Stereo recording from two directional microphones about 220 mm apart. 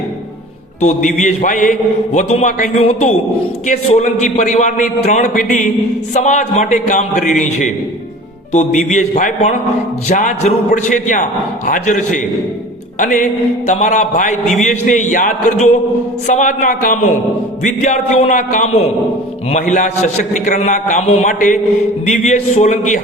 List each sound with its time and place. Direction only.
0.8 s a man's voice: 30° left (ahead or behind)